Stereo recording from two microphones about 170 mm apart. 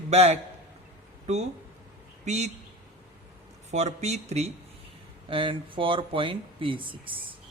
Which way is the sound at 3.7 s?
40° right (ahead or behind).